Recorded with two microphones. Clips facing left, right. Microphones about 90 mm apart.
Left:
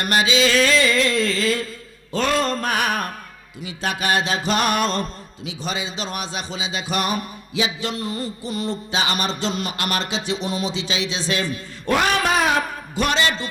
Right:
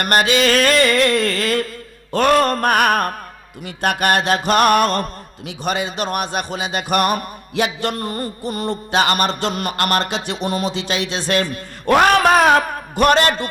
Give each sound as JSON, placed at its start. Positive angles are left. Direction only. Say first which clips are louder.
{"t": 0.0, "sound": "speech", "louder": "right 3 dB", "side_deg": -55}